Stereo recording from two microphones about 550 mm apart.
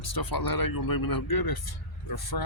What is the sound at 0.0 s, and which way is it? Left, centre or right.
Speech, left.